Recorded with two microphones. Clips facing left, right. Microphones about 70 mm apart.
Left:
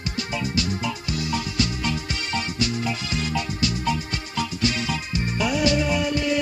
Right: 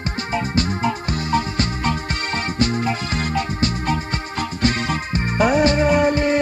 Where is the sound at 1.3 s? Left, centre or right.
Right.